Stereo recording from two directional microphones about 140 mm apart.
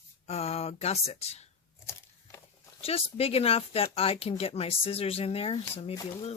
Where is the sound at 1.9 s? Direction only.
20° left (ahead or behind).